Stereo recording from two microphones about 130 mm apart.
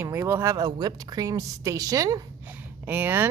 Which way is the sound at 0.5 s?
30° right (ahead or behind).